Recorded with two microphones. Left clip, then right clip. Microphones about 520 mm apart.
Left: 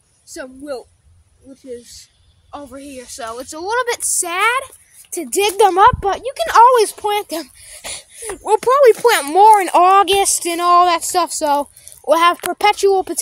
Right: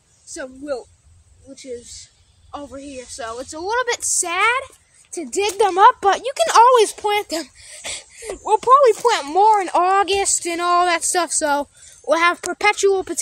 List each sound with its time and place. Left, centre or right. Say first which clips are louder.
0.3 s speech: even; left
5.1 s speech: left 4 dB; left